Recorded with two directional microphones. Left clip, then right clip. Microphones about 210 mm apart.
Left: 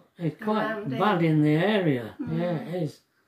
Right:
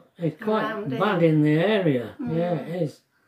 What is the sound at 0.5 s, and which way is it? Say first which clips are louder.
Speech: right 2 dB; 15° right (ahead or behind).